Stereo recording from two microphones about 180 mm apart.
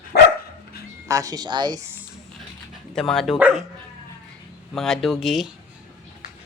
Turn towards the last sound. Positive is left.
turn(degrees=0)  # may be behind; listen again after turning